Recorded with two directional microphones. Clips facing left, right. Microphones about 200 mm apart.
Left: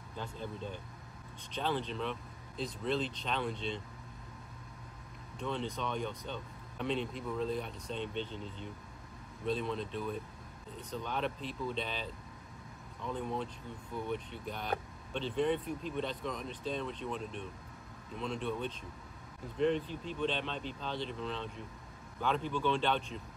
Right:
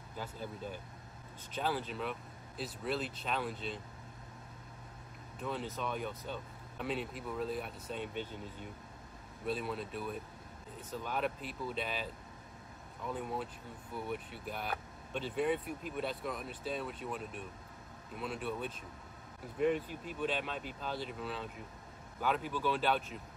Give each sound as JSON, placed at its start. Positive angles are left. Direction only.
{"t": 0.1, "sound": "speech", "side_deg": -5}
{"t": 5.4, "sound": "speech", "side_deg": -5}